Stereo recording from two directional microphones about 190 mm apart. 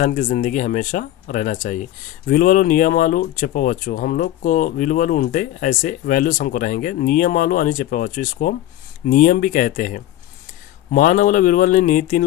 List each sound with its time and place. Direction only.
0.0 s speech: 40° left (ahead or behind)